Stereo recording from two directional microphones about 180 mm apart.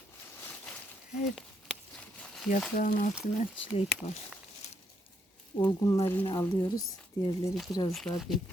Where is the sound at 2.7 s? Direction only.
50° left (ahead or behind).